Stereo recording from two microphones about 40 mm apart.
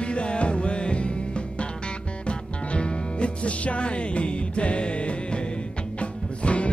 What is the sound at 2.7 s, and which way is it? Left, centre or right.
Music, left.